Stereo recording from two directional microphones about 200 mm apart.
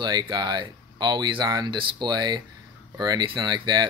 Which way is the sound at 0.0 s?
20° right (ahead or behind).